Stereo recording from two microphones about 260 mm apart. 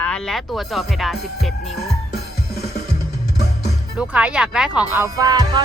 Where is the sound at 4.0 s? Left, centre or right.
Centre.